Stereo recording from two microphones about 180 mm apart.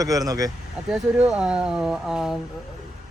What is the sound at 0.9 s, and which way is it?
Speech, 5° right (ahead or behind).